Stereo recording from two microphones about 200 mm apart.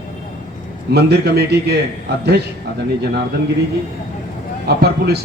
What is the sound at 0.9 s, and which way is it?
Speech, 55° right (ahead or behind).